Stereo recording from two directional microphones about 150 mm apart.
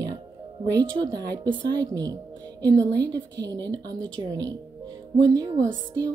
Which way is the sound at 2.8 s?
10° left (ahead or behind).